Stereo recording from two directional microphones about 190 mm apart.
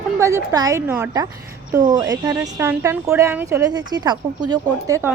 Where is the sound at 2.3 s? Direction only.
10° right (ahead or behind).